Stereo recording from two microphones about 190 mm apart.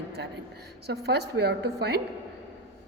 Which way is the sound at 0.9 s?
60° right (ahead or behind).